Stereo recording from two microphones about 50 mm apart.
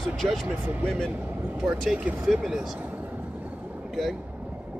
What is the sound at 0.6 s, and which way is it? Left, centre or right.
Speech, right.